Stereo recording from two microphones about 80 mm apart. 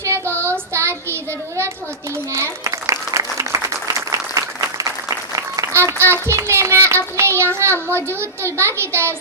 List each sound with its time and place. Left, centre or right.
0.0 s child singing: right
2.3 s applause: right
5.7 s child singing: right